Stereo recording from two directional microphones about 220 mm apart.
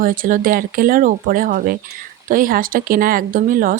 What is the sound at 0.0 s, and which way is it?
Speech, 40° right (ahead or behind).